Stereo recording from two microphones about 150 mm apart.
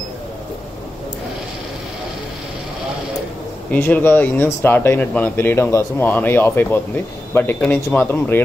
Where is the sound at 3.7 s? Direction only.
10° left (ahead or behind).